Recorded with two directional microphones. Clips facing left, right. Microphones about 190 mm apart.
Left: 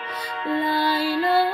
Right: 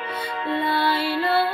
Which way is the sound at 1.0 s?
40° left (ahead or behind).